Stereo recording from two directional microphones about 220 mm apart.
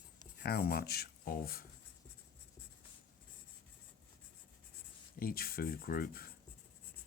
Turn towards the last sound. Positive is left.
turn(degrees=40)  # may be behind; listen again after turning